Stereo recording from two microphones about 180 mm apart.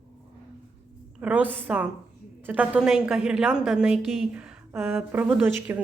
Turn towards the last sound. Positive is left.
turn(degrees=-10)  # may be behind; listen again after turning